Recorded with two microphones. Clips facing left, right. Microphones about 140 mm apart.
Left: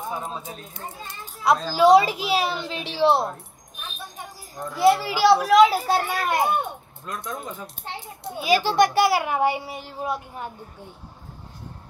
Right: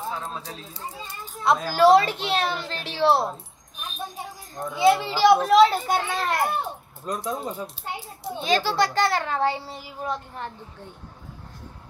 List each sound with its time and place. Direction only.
0.0 s speech: 15° left (ahead or behind)
1.4 s a woman's voice: centre (ahead or behind)
4.8 s a woman's voice: 5° left (ahead or behind)
7.2 s speech: 30° right (ahead or behind)
8.4 s a child's voice: 10° left (ahead or behind)